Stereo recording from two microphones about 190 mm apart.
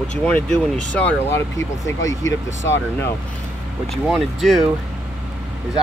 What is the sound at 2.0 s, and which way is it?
Speech, 90° left.